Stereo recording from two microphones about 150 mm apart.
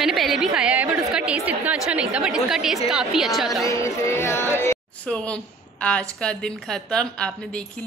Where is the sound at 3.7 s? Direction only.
20° left (ahead or behind).